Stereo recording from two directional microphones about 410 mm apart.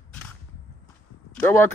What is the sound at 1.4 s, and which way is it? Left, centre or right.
Speech, centre.